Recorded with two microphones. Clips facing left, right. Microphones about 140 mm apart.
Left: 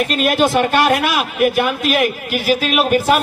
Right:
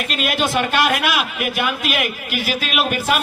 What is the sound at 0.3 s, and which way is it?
A man's voice, 45° left (ahead or behind).